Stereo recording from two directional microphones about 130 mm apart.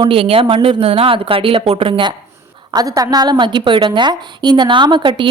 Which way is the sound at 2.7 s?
25° right (ahead or behind).